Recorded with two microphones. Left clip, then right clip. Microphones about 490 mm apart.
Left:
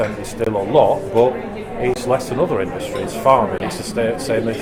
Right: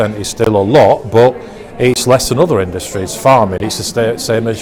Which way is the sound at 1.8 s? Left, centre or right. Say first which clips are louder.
Right 8 dB; right.